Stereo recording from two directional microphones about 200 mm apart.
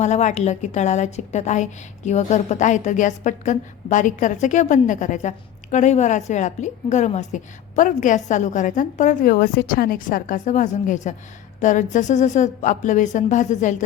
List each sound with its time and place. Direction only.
0.0 s a woman's voice: 35° left (ahead or behind)